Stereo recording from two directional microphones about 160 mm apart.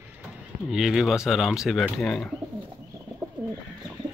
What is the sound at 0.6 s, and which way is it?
Speech, 5° right (ahead or behind).